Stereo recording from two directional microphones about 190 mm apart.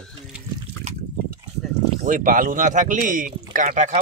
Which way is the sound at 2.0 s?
45° right (ahead or behind).